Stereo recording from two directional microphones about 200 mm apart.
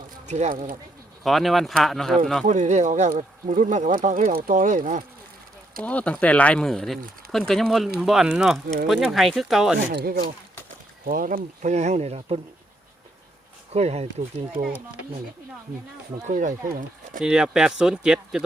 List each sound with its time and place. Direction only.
0.3 s speech: 35° right (ahead or behind)
1.2 s speech: centre (ahead or behind)
2.5 s speech: 35° right (ahead or behind)
5.8 s speech: 5° left (ahead or behind)
9.9 s speech: 50° right (ahead or behind); by 12.4 s 30° right (ahead or behind)
13.7 s speech: 30° right (ahead or behind)
16.2 s speech: 40° right (ahead or behind)
17.2 s speech: 5° right (ahead or behind)